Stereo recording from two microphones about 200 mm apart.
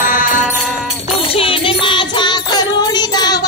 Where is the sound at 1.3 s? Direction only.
25° left (ahead or behind).